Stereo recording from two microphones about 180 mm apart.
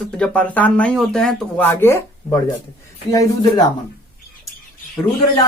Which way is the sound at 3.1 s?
20° left (ahead or behind).